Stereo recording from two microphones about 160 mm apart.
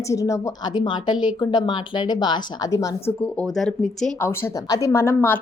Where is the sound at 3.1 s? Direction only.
10° left (ahead or behind).